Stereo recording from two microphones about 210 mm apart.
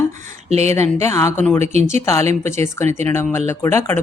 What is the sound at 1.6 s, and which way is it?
Speech, 30° right (ahead or behind).